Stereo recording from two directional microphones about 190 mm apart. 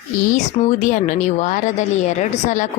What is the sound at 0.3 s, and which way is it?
Speech, 40° left (ahead or behind).